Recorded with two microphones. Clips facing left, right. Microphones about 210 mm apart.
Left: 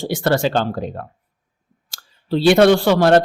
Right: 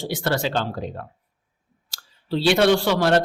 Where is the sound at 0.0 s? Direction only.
50° left (ahead or behind).